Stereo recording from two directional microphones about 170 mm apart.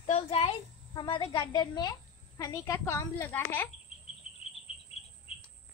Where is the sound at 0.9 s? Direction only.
30° left (ahead or behind); by 3.6 s 10° left (ahead or behind).